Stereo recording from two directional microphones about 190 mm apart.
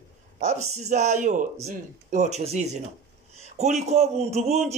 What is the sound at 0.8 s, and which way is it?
Speech, 40° right (ahead or behind).